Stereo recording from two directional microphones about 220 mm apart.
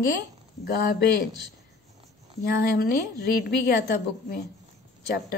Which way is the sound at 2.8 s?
45° left (ahead or behind).